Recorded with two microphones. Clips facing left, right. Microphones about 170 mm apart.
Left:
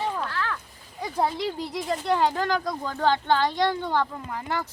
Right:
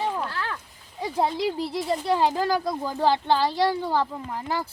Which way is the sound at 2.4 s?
25° right (ahead or behind).